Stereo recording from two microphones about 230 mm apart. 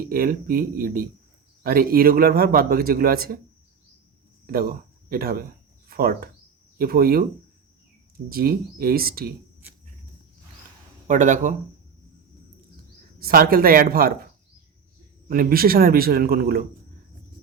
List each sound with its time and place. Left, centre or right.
0.0 s a man's voice: right
4.4 s a man's voice: right
8.3 s a man's voice: right
11.1 s a man's voice: right
13.1 s a man's voice: right
15.3 s a man's voice: right